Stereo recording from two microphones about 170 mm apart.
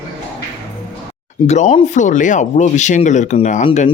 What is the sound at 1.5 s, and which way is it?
Speech, 40° left (ahead or behind).